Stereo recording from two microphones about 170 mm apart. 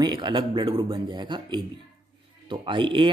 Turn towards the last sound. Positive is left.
turn(degrees=-30)  # may be behind; listen again after turning